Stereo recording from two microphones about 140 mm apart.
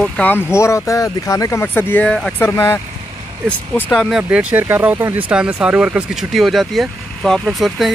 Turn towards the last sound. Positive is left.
turn(degrees=0)  # may be behind; listen again after turning